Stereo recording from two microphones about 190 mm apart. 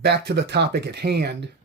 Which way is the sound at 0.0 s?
60° right (ahead or behind).